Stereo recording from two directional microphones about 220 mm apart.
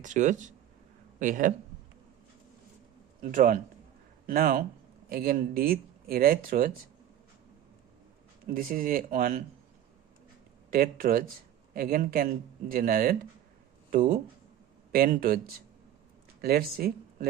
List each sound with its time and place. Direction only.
0.0 s speech: 35° right (ahead or behind)
3.2 s a man's voice: 35° right (ahead or behind)
8.4 s speech: 40° right (ahead or behind)
10.7 s speech: 40° right (ahead or behind)
16.4 s speech: 45° right (ahead or behind)